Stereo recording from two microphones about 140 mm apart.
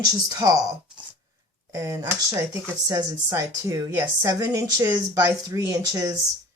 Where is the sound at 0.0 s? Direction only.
25° right (ahead or behind).